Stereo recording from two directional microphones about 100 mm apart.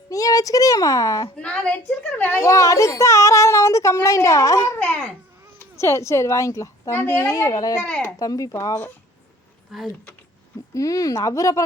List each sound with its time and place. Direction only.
0.1 s a sound: 35° left (ahead or behind)
1.4 s a woman's voice: 10° left (ahead or behind)
2.4 s a woman's voice: 30° left (ahead or behind)
7.8 s a woman's voice: 10° left (ahead or behind)
8.1 s speech: 35° left (ahead or behind)
9.7 s speech: centre (ahead or behind)
10.8 s speech: 35° left (ahead or behind)